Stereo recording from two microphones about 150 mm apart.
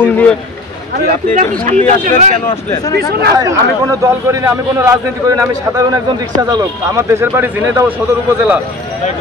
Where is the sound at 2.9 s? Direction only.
90° right.